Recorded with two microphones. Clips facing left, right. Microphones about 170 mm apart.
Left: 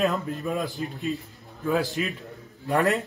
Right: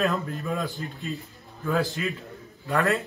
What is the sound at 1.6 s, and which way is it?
A man's voice, 15° left (ahead or behind).